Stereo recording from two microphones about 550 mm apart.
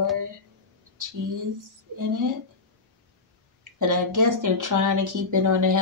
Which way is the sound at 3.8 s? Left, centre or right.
Right.